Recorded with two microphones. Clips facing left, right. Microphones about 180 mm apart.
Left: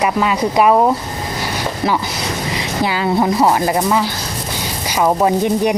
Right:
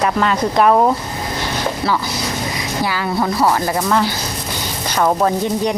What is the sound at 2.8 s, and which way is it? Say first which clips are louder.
Speech: left 4 dB; 20° left (ahead or behind).